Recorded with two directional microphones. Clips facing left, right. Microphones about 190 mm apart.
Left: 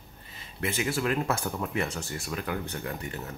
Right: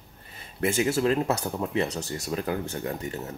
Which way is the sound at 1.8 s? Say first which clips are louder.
Right 4 dB; 40° right (ahead or behind).